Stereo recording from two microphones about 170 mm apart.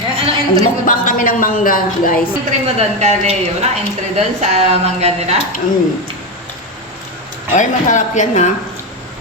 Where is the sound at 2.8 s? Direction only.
45° right (ahead or behind).